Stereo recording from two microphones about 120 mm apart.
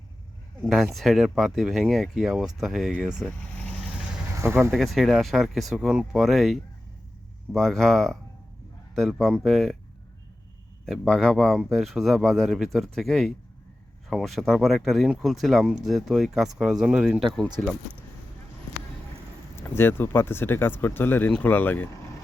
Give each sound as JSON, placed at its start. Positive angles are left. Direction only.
{"t": 0.6, "sound": "speech", "side_deg": 0}
{"t": 4.4, "sound": "speech", "side_deg": -20}
{"t": 4.7, "sound": "speech", "side_deg": 0}
{"t": 10.8, "sound": "speech", "side_deg": 5}
{"t": 17.6, "sound": "speech", "side_deg": 15}
{"t": 19.5, "sound": "speech", "side_deg": 20}